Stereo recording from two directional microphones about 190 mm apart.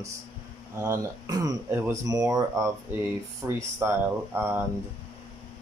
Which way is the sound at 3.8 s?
10° right (ahead or behind).